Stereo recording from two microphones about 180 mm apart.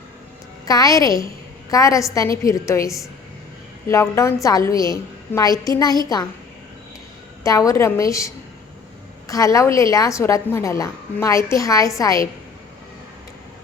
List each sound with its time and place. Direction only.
0.6 s a woman's voice: 20° left (ahead or behind)
7.4 s a woman's voice: 20° left (ahead or behind)